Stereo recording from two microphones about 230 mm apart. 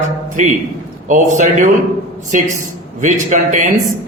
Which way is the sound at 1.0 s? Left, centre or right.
Right.